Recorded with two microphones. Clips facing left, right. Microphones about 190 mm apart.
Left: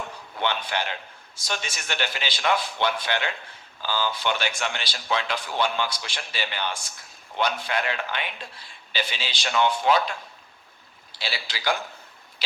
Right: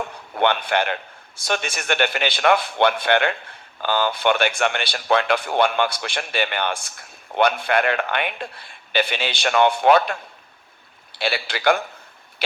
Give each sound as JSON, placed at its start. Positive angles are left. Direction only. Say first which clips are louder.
{"t": 0.3, "sound": "a man's voice", "louder": "right 8 dB", "side_deg": -60}